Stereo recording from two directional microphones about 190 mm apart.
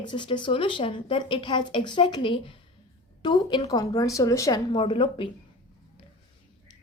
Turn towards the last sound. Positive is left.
turn(degrees=25)  # may be behind; listen again after turning